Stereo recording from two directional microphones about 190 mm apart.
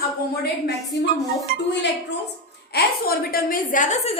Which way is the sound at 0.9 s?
60° left (ahead or behind).